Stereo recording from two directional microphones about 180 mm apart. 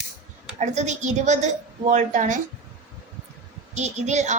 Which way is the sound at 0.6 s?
40° right (ahead or behind).